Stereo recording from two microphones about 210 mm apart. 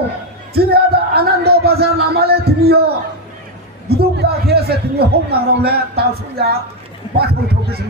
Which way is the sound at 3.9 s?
50° right (ahead or behind).